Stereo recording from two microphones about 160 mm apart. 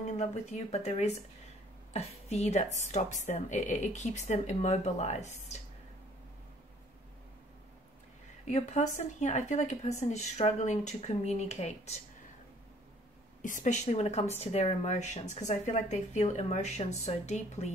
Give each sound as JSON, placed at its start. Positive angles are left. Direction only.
{"t": 0.0, "sound": "a woman's voice", "side_deg": 45}
{"t": 8.5, "sound": "a woman's voice", "side_deg": 45}
{"t": 13.4, "sound": "a woman's voice", "side_deg": 55}